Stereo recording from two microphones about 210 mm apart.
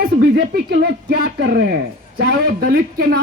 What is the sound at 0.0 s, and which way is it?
Speech, 45° right (ahead or behind).